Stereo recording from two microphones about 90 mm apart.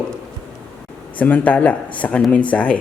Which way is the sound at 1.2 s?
15° left (ahead or behind).